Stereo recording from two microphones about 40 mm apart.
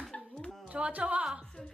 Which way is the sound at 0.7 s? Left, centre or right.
Right.